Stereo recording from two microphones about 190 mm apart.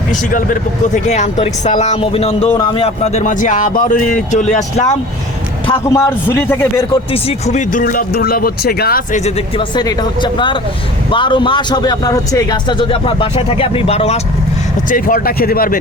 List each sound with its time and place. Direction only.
0.1 s speech: 45° left (ahead or behind)
5.7 s a man's voice: 15° left (ahead or behind)
7.1 s speech: 35° left (ahead or behind)
9.6 s a man's voice: 20° left (ahead or behind)
14.8 s speech: 45° left (ahead or behind)